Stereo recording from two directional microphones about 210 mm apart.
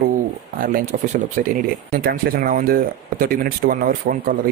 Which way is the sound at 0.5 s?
40° right (ahead or behind).